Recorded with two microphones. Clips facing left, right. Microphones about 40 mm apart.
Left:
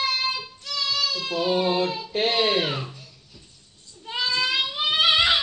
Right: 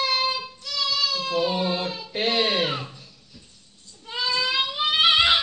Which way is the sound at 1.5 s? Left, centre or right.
Centre.